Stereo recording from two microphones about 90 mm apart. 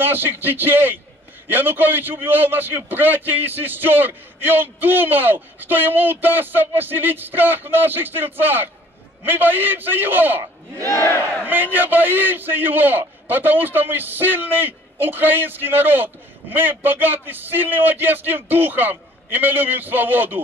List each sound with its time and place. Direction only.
0.0 s a man's voice: 25° right (ahead or behind)
11.4 s a man's voice: 20° right (ahead or behind)